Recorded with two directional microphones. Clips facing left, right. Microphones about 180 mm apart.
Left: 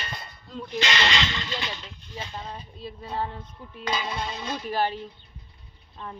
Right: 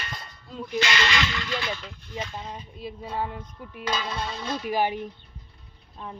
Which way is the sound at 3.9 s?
15° left (ahead or behind).